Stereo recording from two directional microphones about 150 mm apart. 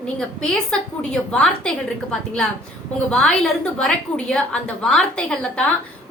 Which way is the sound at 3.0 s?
5° left (ahead or behind).